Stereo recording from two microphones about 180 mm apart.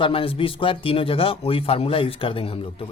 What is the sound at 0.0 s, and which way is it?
Speech, 30° left (ahead or behind).